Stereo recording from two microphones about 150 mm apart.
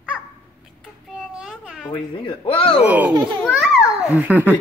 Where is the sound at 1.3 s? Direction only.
Centre (ahead or behind).